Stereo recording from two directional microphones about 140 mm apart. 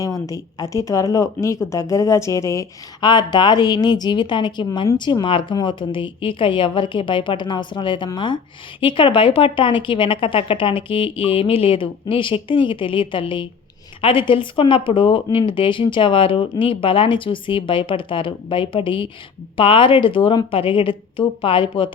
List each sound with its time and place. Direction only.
0.0 s speech: 25° left (ahead or behind)
3.0 s speech: 30° left (ahead or behind)